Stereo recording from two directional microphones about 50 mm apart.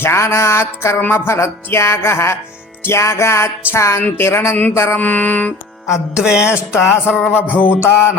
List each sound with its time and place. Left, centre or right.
0.0 s music: left
4.2 s music: left
4.7 s music: left
4.9 s music: left
6.1 s a sound: centre
7.3 s music: left
7.8 s a sound: left